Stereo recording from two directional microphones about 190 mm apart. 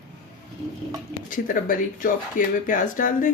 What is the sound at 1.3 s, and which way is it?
Speech, 45° left (ahead or behind).